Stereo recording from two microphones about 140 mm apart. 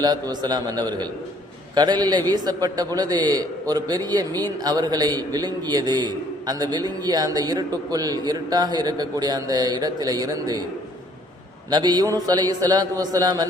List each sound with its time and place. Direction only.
0.0 s a man's voice: 30° right (ahead or behind)
11.7 s a man's voice: 30° right (ahead or behind)